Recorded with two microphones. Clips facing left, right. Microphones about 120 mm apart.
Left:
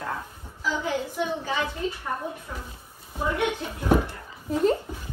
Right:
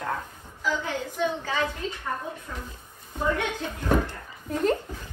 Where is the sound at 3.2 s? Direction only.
15° left (ahead or behind).